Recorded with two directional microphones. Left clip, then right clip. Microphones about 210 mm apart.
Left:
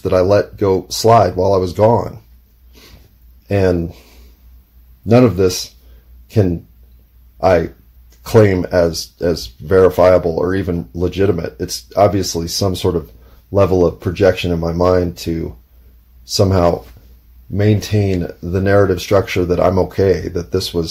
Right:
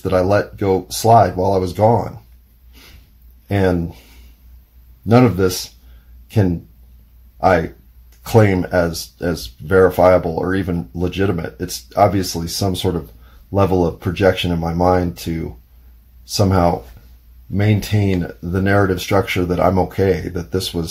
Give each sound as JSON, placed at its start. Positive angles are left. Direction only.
{"t": 0.0, "sound": "speech", "side_deg": 15}
{"t": 3.4, "sound": "speech", "side_deg": 15}
{"t": 5.0, "sound": "speech", "side_deg": 15}
{"t": 8.2, "sound": "speech", "side_deg": 20}